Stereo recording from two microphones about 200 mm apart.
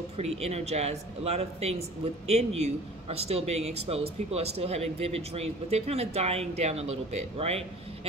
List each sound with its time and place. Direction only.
0.2 s speech: 30° right (ahead or behind)